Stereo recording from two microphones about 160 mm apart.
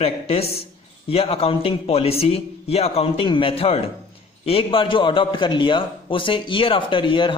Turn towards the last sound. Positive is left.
turn(degrees=30)  # may be behind; listen again after turning